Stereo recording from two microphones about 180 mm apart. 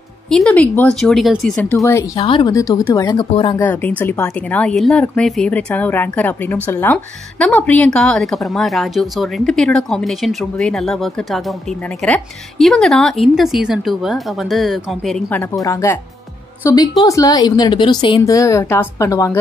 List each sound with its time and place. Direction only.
0.3 s a woman's voice: 5° left (ahead or behind)
2.1 s a woman's voice: 25° left (ahead or behind)
3.6 s a woman's voice: 10° left (ahead or behind)